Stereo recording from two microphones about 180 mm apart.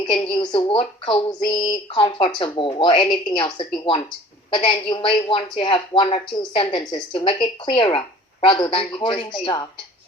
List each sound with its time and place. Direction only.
0.0 s a woman's voice: 25° left (ahead or behind)